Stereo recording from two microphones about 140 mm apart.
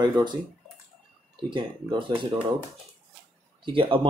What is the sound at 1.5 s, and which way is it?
Speech, 35° right (ahead or behind).